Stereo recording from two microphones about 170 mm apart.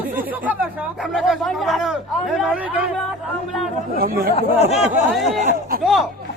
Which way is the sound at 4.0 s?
60° right (ahead or behind).